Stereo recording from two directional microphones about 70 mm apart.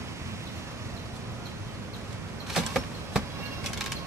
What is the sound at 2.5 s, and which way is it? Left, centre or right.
Vehicle, centre.